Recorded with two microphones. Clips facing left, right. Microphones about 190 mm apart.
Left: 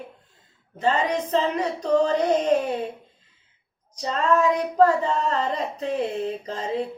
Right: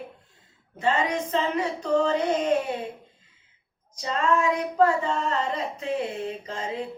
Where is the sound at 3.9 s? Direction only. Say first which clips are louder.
Left 3 dB; 35° left (ahead or behind).